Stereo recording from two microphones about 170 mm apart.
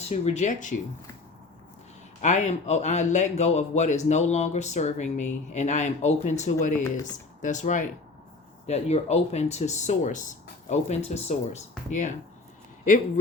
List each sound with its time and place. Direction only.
0.0 s a man's voice: 40° left (ahead or behind)
2.2 s a man's voice: 45° left (ahead or behind)